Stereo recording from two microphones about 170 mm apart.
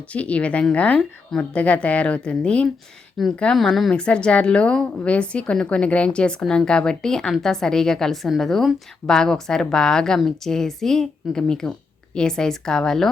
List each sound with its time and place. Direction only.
0.1 s a woman's voice: 10° left (ahead or behind)